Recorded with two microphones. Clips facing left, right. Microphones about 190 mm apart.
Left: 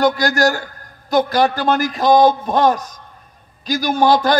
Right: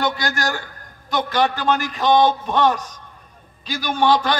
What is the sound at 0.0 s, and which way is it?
A man's voice, 40° left (ahead or behind).